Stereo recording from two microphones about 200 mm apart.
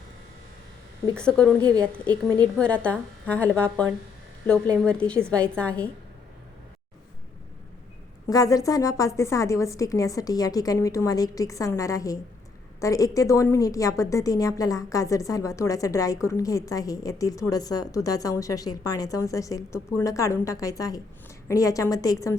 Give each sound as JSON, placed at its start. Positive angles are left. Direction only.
{"t": 1.1, "sound": "speech", "side_deg": 5}
{"t": 2.6, "sound": "a woman's voice", "side_deg": 5}
{"t": 4.9, "sound": "a woman's voice", "side_deg": 5}
{"t": 8.3, "sound": "a woman's voice", "side_deg": 15}